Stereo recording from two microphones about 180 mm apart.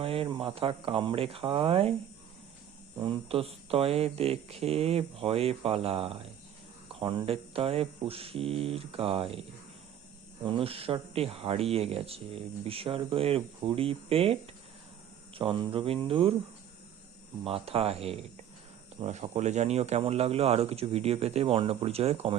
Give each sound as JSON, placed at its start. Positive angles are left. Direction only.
{"t": 0.0, "sound": "speech", "side_deg": -30}
{"t": 3.0, "sound": "speech", "side_deg": -30}
{"t": 10.4, "sound": "speech", "side_deg": -30}
{"t": 15.4, "sound": "a sound", "side_deg": -30}
{"t": 17.4, "sound": "speech", "side_deg": -30}